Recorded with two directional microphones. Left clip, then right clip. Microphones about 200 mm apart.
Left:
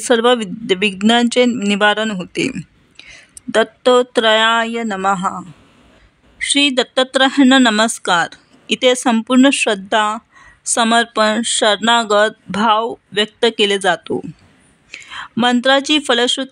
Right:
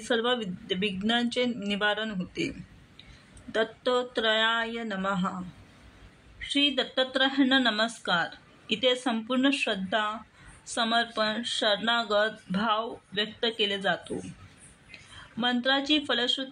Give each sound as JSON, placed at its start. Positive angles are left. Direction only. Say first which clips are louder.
{"t": 0.0, "sound": "speech", "louder": "left 14 dB", "side_deg": 60}
{"t": 3.5, "sound": "speech", "louder": "left 15 dB", "side_deg": 60}
{"t": 6.4, "sound": "speech", "louder": "left 12 dB", "side_deg": 60}